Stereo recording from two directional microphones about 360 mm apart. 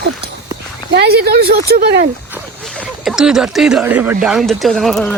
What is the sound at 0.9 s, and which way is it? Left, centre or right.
Speech, right.